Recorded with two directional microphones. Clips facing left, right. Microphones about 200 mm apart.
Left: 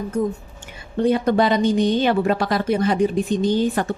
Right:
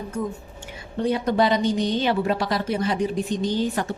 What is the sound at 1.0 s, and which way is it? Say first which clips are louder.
A woman's voice: left 3 dB; 55° left (ahead or behind).